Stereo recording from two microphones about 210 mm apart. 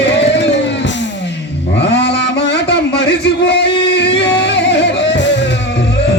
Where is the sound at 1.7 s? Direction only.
55° left (ahead or behind).